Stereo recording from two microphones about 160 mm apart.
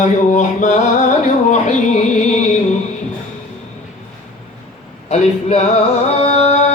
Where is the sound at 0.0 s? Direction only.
50° left (ahead or behind).